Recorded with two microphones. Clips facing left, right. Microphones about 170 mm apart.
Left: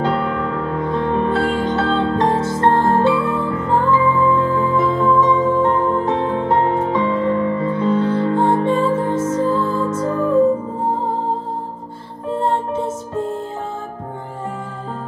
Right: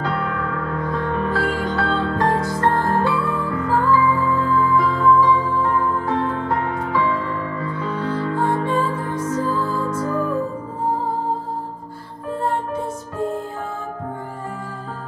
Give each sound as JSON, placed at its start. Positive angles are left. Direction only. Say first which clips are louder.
{"t": 0.0, "sound": "music", "louder": "left 5 dB", "side_deg": 25}
{"t": 12.4, "sound": "music", "louder": "left 4 dB", "side_deg": 20}